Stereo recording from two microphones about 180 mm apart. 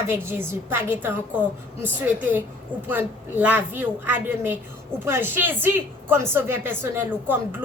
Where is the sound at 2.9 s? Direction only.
10° right (ahead or behind).